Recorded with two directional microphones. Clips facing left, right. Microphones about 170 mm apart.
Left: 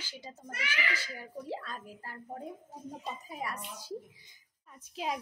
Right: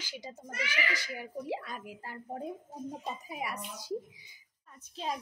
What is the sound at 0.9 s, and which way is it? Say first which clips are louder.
Speech: right 3 dB; 15° right (ahead or behind).